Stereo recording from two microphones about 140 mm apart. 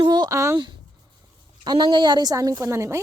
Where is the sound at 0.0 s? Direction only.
30° right (ahead or behind).